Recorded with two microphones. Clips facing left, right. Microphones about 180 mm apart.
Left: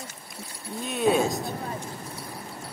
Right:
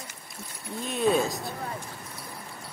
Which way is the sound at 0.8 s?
Centre (ahead or behind).